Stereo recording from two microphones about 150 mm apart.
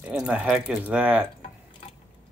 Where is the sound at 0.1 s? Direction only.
10° right (ahead or behind).